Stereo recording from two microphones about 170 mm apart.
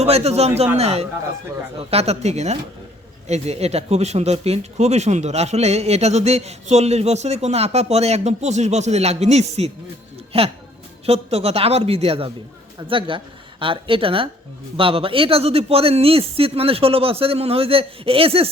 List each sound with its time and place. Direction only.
0.0 s speech: 40° right (ahead or behind)